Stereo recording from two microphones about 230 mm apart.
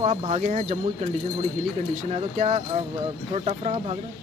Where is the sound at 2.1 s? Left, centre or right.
Right.